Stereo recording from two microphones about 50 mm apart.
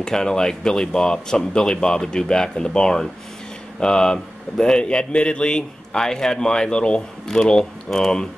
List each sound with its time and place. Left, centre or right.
0.0 s a man's voice: centre